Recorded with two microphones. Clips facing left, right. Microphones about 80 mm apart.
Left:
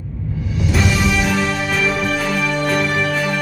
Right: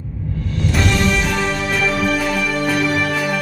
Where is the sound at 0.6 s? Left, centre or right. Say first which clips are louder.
Even; centre.